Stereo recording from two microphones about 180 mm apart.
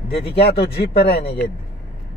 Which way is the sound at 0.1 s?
65° left (ahead or behind).